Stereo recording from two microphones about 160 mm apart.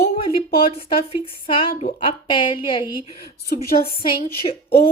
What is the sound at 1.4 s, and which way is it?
A woman's voice, 35° left (ahead or behind).